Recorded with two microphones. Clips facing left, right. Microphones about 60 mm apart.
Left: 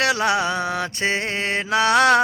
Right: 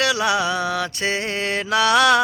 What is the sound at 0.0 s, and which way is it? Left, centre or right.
Mantra, left.